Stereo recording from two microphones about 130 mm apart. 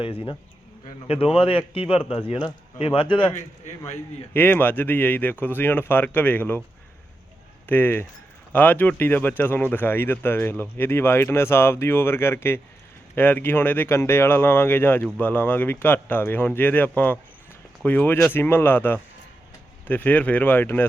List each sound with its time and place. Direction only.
1.0 s a man's voice: 45° left (ahead or behind)
3.3 s a man's voice: 70° left (ahead or behind)
4.4 s speech: 15° left (ahead or behind)
7.7 s speech: 15° left (ahead or behind)